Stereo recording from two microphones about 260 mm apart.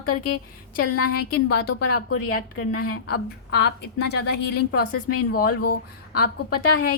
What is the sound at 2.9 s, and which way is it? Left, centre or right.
A woman's voice, left.